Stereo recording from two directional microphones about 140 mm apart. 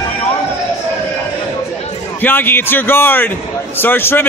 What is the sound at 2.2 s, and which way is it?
A man's voice, 15° left (ahead or behind).